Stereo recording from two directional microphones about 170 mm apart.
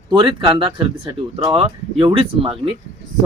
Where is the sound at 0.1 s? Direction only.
30° right (ahead or behind).